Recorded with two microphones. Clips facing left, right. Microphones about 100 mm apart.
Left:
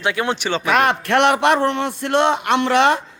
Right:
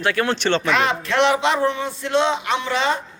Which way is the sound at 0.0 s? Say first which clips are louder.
Right 1 dB; 15° left (ahead or behind).